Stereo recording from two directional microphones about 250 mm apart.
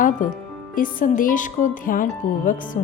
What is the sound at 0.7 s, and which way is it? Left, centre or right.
Speech, left.